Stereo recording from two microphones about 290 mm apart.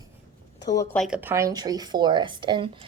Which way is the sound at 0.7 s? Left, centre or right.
Centre.